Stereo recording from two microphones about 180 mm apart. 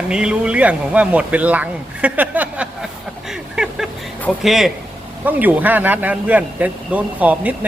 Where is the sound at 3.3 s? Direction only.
5° right (ahead or behind).